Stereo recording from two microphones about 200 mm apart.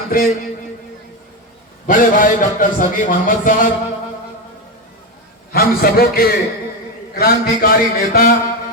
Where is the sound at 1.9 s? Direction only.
40° left (ahead or behind).